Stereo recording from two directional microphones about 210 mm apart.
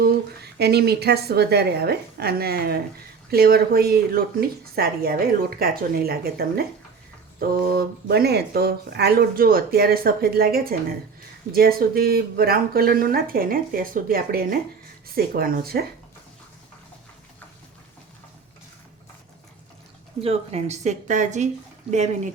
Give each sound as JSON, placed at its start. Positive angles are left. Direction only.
{"t": 0.0, "sound": "speech", "side_deg": -50}
{"t": 20.2, "sound": "speech", "side_deg": -30}